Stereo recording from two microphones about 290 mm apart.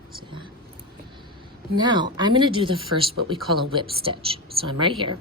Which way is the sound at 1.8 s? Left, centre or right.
Centre.